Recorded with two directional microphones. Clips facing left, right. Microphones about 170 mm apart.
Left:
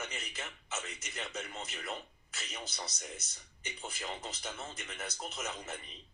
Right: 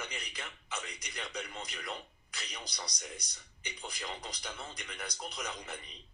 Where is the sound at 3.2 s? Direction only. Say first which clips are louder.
Even; 25° left (ahead or behind).